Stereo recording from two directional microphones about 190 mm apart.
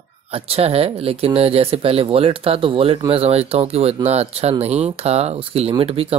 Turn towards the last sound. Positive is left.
turn(degrees=-30)  # may be behind; listen again after turning